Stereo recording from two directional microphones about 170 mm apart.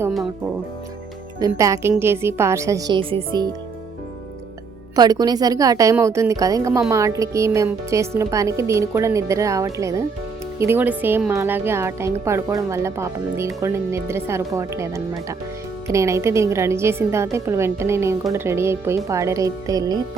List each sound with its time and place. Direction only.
1.4 s a woman's voice: 20° right (ahead or behind)
4.9 s a woman's voice: 25° right (ahead or behind)